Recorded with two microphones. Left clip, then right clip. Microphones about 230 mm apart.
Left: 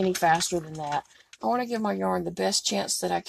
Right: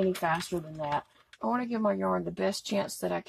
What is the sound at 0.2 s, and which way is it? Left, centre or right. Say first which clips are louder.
Speech: left 7 dB; left.